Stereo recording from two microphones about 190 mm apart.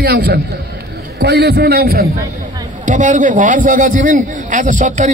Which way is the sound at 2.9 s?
45° right (ahead or behind).